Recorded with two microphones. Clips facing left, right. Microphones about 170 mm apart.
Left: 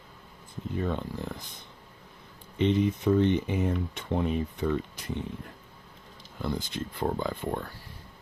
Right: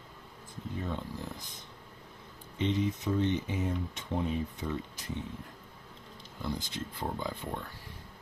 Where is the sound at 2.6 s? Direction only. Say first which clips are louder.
Left 6 dB; 60° left (ahead or behind).